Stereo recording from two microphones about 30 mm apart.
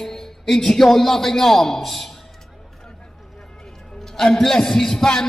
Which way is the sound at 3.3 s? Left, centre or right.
Centre.